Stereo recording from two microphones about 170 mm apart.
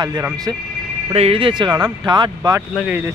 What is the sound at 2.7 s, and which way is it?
Speech, 10° right (ahead or behind).